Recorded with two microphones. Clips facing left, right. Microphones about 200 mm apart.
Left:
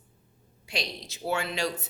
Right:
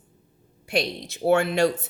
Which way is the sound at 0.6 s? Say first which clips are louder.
Right 9 dB; 55° right (ahead or behind).